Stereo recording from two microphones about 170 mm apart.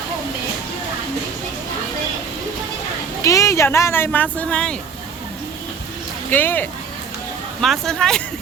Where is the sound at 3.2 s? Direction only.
20° left (ahead or behind).